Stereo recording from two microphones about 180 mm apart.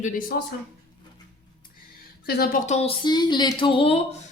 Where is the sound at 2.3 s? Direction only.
60° left (ahead or behind).